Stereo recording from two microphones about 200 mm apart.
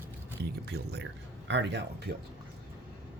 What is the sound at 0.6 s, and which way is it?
Speech, 55° right (ahead or behind).